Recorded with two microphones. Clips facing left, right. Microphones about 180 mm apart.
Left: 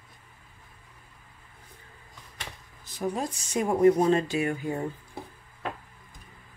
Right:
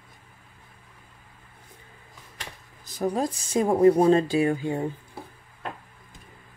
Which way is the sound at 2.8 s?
35° right (ahead or behind).